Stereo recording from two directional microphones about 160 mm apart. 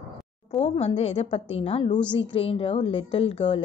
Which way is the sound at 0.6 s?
40° left (ahead or behind).